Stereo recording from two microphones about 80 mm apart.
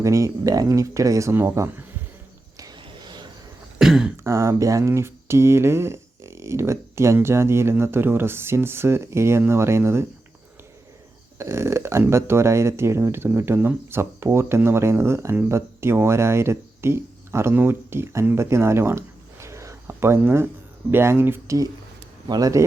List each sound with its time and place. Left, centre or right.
0.0 s speech: right
1.3 s speech: right
2.7 s a sound: right
3.8 s throat clearing: centre
4.2 s speech: right
11.3 s speech: right
21.4 s speech: right